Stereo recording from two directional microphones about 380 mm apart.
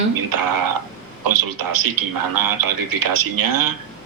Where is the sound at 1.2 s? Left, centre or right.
Right.